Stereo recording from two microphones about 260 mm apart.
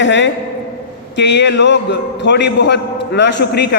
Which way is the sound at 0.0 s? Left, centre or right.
Left.